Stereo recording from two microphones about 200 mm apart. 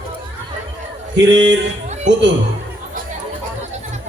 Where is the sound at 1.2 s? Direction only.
60° right (ahead or behind).